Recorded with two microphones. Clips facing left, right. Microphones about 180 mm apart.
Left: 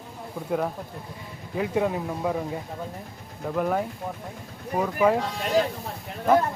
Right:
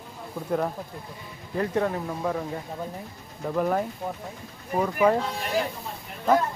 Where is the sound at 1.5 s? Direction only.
5° left (ahead or behind).